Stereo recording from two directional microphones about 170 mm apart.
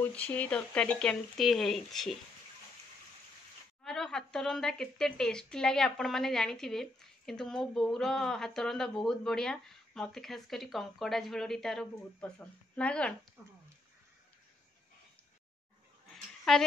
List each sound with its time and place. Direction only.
0.0 s a woman's voice: 10° left (ahead or behind)
3.8 s a woman's voice: centre (ahead or behind)
13.4 s speech: 15° right (ahead or behind)
16.1 s a sound: centre (ahead or behind)